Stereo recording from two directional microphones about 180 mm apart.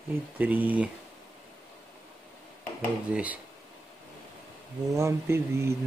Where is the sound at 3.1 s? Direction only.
5° right (ahead or behind).